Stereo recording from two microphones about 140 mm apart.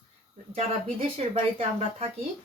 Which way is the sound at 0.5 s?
45° right (ahead or behind).